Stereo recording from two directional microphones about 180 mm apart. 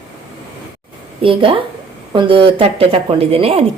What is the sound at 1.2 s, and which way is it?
A woman's voice, 30° right (ahead or behind).